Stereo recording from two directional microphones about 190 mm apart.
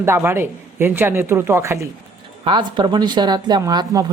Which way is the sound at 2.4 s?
25° right (ahead or behind).